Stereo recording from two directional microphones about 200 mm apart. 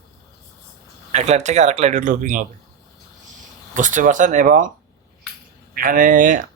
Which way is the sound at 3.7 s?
40° right (ahead or behind).